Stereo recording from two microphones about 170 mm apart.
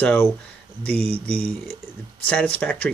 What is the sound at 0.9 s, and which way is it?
Speech, 35° right (ahead or behind).